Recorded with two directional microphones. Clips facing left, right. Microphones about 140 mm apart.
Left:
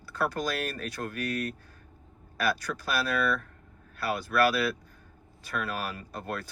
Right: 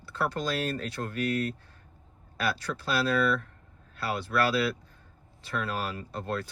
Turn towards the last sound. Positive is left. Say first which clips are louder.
# right 2 dB
turn(degrees=-25)  # may be behind; listen again after turning